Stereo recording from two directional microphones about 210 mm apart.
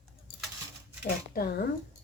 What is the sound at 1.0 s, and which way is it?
Speech, 45° left (ahead or behind).